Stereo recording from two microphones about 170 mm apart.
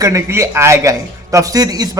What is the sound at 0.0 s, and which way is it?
A man's voice, 20° right (ahead or behind).